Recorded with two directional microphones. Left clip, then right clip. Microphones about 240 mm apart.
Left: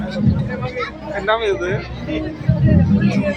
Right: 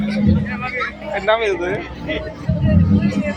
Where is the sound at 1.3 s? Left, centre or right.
Centre.